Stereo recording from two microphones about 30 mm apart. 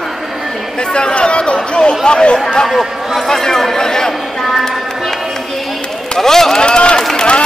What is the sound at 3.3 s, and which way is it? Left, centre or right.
Speech, centre.